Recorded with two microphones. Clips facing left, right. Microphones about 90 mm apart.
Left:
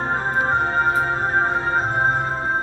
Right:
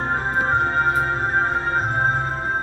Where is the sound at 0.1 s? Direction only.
20° left (ahead or behind).